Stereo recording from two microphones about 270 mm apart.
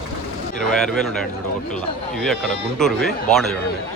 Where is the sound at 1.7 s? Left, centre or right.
Centre.